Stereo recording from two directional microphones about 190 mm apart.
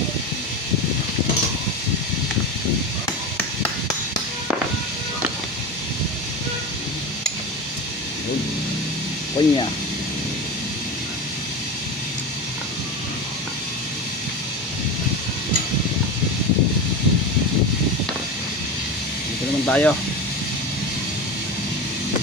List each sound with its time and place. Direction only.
9.4 s speech: 20° left (ahead or behind)
19.6 s vehicle: 5° left (ahead or behind)